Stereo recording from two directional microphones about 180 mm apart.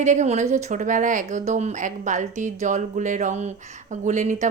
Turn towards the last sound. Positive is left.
turn(degrees=-40)  # may be behind; listen again after turning